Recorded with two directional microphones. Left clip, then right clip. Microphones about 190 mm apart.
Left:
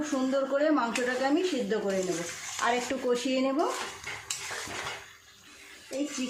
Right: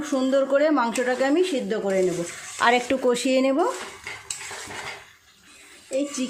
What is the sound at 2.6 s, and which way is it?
Speech, 50° right (ahead or behind).